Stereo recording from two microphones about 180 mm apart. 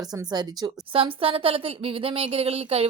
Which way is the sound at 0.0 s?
20° right (ahead or behind).